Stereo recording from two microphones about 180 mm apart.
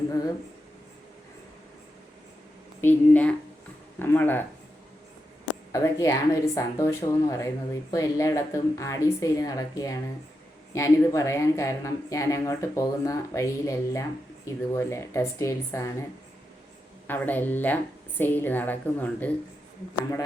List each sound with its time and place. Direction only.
2.8 s speech: 10° left (ahead or behind)
5.7 s speech: 15° left (ahead or behind)
17.1 s speech: 10° left (ahead or behind)